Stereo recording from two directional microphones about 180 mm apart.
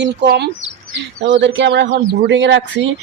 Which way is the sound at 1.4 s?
75° right (ahead or behind).